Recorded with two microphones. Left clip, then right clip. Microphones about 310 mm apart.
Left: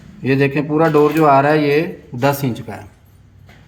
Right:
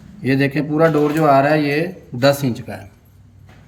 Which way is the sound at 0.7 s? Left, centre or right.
Centre.